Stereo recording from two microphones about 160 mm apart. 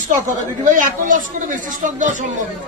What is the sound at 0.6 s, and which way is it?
Speech, 55° right (ahead or behind).